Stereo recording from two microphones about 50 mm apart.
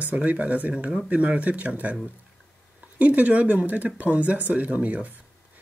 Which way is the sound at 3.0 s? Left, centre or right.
Right.